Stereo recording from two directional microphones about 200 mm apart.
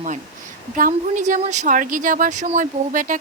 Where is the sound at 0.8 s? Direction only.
40° right (ahead or behind).